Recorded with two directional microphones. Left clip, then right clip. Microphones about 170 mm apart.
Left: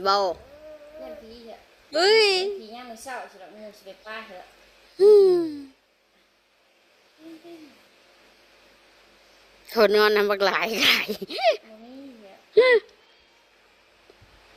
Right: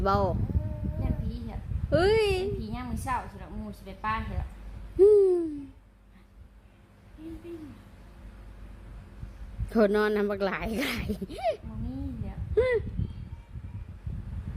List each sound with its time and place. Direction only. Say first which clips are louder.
0.0 s speech: left 5 dB; 10° left (ahead or behind)
1.9 s speech: left 5 dB; 15° left (ahead or behind)
4.9 s speech: left 4 dB; 20° left (ahead or behind)
9.7 s speech: left 6 dB; 25° left (ahead or behind)